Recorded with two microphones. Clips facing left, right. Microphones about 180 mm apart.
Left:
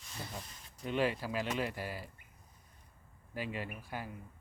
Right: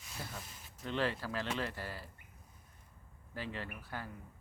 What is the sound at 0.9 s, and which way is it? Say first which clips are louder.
Speech: left 3 dB; 15° left (ahead or behind).